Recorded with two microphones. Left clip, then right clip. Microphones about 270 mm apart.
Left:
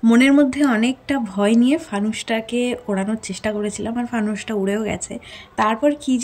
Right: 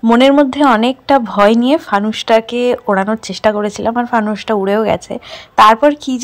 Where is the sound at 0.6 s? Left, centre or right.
Right.